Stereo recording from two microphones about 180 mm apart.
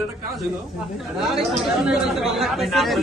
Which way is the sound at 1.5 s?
5° right (ahead or behind).